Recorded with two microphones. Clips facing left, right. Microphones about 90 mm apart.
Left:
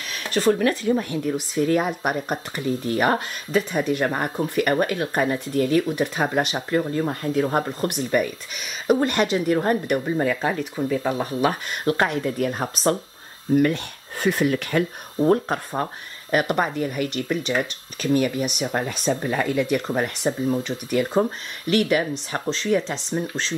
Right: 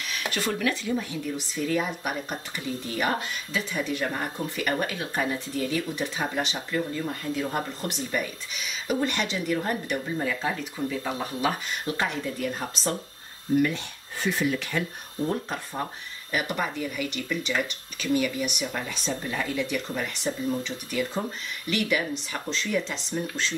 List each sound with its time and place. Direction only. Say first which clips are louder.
0.2 s speech: left 8 dB; 35° left (ahead or behind); by 12.9 s 55° left (ahead or behind)
14.2 s speech: left 5 dB; 55° left (ahead or behind); by 23.5 s 35° left (ahead or behind)